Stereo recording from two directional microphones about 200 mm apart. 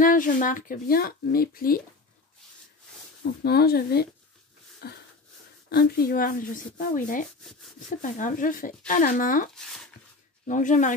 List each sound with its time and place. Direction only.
0.0 s speech: 40° left (ahead or behind)
3.4 s speech: 50° left (ahead or behind)
9.6 s speech: centre (ahead or behind)
10.4 s speech: 40° left (ahead or behind)